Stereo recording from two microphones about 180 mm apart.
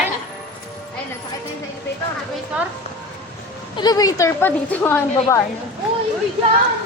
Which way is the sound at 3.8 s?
20° left (ahead or behind).